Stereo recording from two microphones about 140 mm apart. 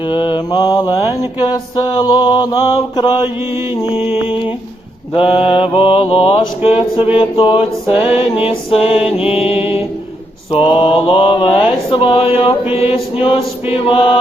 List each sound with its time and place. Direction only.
0.1 s mantra: 35° left (ahead or behind)
3.8 s mantra: 40° left (ahead or behind)